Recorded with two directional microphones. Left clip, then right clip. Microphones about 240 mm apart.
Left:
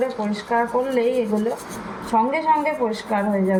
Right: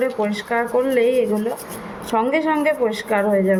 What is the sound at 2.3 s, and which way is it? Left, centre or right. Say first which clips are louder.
Speech: right 1 dB; right.